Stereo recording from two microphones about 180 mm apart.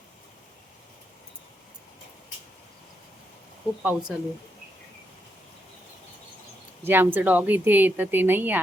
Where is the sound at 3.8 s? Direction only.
10° right (ahead or behind).